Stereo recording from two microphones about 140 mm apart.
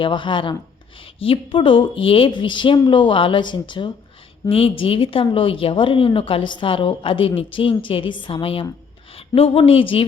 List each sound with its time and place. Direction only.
0.0 s a woman's voice: 35° left (ahead or behind)